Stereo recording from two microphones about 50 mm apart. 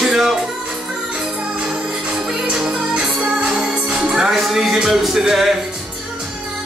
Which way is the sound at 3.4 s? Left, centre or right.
Centre.